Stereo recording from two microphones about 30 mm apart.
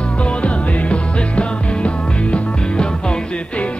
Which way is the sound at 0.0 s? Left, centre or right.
Left.